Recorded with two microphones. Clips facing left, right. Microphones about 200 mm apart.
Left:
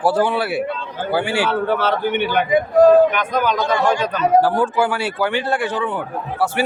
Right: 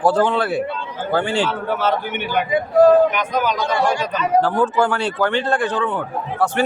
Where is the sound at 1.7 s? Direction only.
60° left (ahead or behind).